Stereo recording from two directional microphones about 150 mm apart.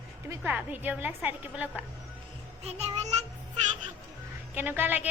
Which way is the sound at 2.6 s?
45° right (ahead or behind).